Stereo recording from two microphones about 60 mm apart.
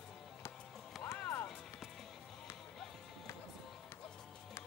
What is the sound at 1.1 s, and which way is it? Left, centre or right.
Music, left.